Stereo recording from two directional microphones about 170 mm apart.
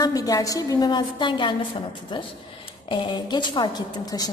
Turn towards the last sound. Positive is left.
turn(degrees=25)  # may be behind; listen again after turning